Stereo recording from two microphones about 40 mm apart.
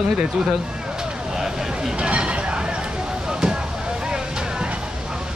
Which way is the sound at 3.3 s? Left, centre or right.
Centre.